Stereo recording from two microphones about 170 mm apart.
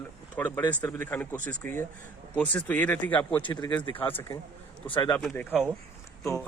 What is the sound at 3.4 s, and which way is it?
Speech, 25° left (ahead or behind).